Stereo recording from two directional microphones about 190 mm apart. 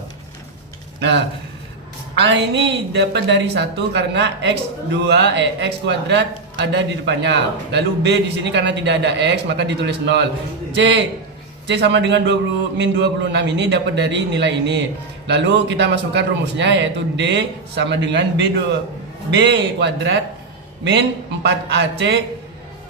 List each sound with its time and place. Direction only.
0.9 s a woman's voice: 65° right (ahead or behind)
21.4 s a woman's voice: 65° right (ahead or behind)